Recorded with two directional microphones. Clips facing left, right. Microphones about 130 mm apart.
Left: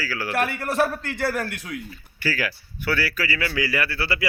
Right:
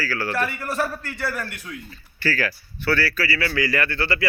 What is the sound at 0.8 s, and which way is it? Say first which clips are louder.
Speech: left 4 dB; 70° left (ahead or behind).